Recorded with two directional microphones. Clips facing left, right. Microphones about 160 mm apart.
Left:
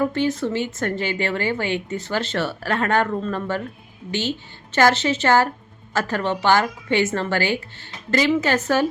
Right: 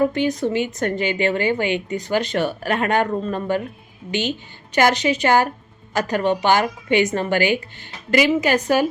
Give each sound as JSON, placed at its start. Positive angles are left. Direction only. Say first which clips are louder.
{"t": 0.1, "sound": "speech", "louder": "right 1 dB", "side_deg": -15}